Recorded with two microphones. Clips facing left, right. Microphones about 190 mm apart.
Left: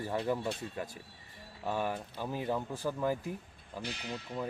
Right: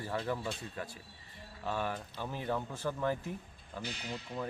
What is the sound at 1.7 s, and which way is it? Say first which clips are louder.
Speech: left 2 dB; 15° left (ahead or behind).